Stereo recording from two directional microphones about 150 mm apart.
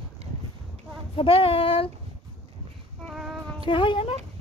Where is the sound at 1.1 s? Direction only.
35° left (ahead or behind).